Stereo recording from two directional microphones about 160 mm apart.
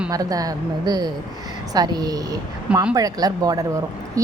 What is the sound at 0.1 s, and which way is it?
A woman's voice, 20° right (ahead or behind).